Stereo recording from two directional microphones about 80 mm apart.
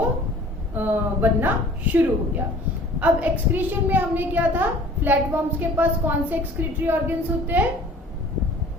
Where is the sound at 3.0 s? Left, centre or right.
Right.